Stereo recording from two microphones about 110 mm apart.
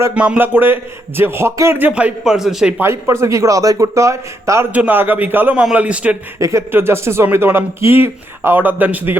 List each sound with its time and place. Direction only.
0.1 s speech: 10° right (ahead or behind)
1.9 s a man's voice: 10° right (ahead or behind)
2.7 s speech: 25° right (ahead or behind)
4.7 s a man's voice: 15° right (ahead or behind)
6.4 s a man's voice: 25° right (ahead or behind)